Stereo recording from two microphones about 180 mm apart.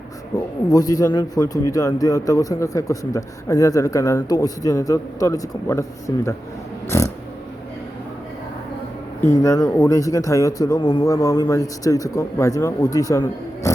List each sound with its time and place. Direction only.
0.3 s speech: 20° left (ahead or behind)
6.9 s a sound: 15° left (ahead or behind)
9.3 s speech: 15° left (ahead or behind)